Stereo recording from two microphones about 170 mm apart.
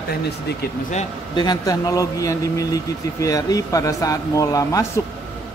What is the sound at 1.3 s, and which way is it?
Speech, 25° left (ahead or behind).